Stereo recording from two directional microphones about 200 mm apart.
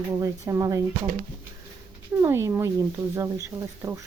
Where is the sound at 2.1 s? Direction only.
10° right (ahead or behind).